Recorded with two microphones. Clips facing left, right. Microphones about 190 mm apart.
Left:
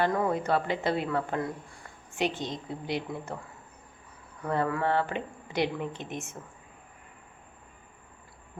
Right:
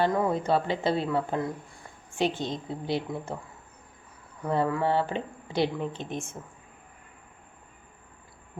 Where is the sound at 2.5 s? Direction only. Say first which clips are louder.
Right 3 dB; 30° right (ahead or behind).